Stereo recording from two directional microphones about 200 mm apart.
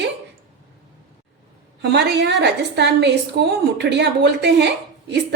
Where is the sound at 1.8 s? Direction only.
60° right (ahead or behind).